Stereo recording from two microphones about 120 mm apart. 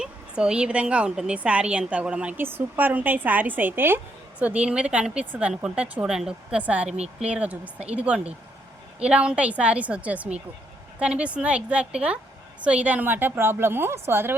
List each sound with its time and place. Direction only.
0.0 s a woman's voice: 5° right (ahead or behind)
6.8 s speech: 65° right (ahead or behind)
7.3 s a woman's voice: 10° right (ahead or behind)